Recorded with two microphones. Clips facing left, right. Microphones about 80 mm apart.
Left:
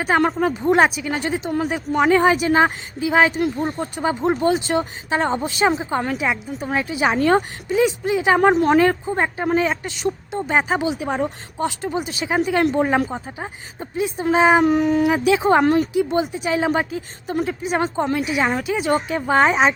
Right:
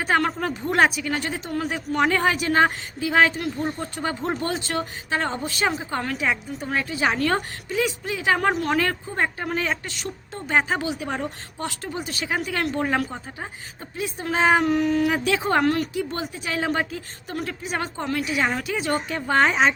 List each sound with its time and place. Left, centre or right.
0.0 s speech: centre
0.7 s speech: centre